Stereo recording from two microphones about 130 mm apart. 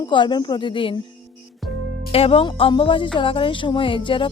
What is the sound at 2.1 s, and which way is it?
Speech, 50° left (ahead or behind).